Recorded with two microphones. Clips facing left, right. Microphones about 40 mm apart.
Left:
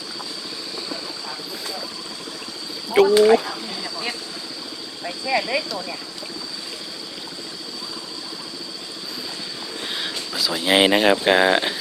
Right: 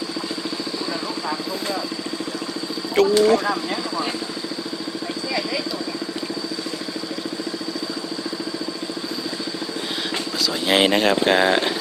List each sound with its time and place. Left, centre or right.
2.9 s speech: centre
10.3 s speech: centre